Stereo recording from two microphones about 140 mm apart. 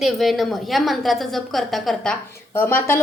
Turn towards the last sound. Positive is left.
turn(degrees=15)  # may be behind; listen again after turning